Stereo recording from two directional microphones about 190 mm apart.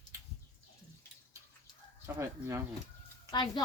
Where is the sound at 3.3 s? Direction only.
25° left (ahead or behind).